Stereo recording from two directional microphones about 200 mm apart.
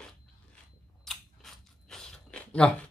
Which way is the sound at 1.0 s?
Centre (ahead or behind).